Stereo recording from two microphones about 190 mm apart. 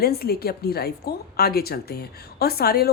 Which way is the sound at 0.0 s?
55° left (ahead or behind).